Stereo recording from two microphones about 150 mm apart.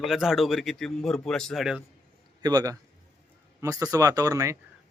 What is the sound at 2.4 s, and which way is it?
Speech, 25° right (ahead or behind).